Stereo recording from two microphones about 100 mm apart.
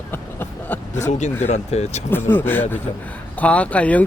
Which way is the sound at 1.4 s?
90° left.